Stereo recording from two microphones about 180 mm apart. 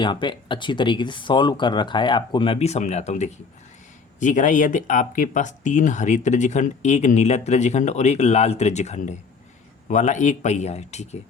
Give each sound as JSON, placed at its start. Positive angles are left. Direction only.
{"t": 0.0, "sound": "speech", "side_deg": 25}